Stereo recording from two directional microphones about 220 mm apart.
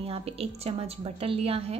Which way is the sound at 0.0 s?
25° right (ahead or behind).